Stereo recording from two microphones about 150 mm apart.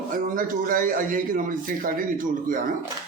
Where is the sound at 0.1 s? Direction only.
65° right (ahead or behind).